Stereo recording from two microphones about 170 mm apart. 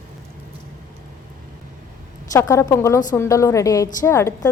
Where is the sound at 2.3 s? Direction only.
15° left (ahead or behind).